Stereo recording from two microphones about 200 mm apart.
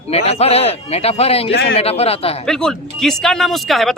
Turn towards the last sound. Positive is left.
turn(degrees=0)  # may be behind; listen again after turning